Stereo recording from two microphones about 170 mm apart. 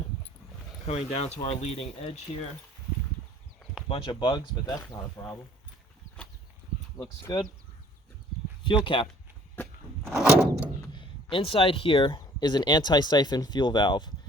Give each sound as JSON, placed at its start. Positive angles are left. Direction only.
{"t": 0.9, "sound": "speech", "side_deg": 40}
{"t": 3.8, "sound": "speech", "side_deg": 30}
{"t": 6.9, "sound": "speech", "side_deg": 20}
{"t": 8.6, "sound": "speech", "side_deg": 30}
{"t": 10.2, "sound": "door", "side_deg": -5}
{"t": 10.9, "sound": "speech", "side_deg": 30}